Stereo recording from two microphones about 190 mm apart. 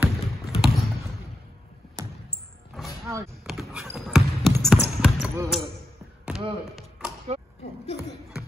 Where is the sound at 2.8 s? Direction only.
Centre (ahead or behind).